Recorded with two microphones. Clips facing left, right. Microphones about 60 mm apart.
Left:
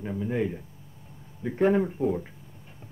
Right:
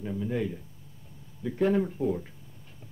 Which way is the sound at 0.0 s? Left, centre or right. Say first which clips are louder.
Left 2 dB; left.